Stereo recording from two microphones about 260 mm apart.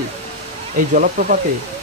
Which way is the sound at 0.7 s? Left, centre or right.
Right.